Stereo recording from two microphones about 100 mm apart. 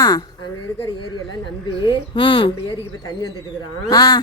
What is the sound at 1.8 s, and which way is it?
Speech, 55° left (ahead or behind).